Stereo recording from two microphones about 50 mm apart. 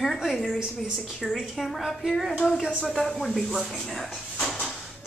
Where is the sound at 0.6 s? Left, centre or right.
Centre.